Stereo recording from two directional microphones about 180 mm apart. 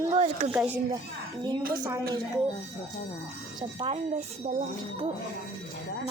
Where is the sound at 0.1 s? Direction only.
35° right (ahead or behind).